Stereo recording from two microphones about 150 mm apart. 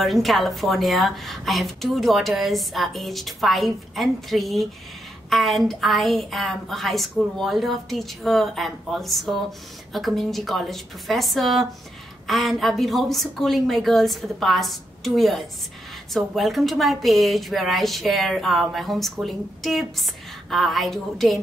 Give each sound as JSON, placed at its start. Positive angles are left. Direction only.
{"t": 0.0, "sound": "a woman's voice", "side_deg": 0}